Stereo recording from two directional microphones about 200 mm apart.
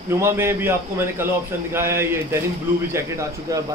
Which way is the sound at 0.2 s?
10° right (ahead or behind).